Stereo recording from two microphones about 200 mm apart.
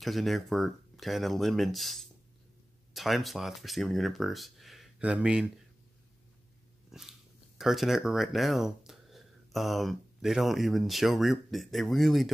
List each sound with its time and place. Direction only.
0.0 s speech: centre (ahead or behind)
6.9 s speech: centre (ahead or behind)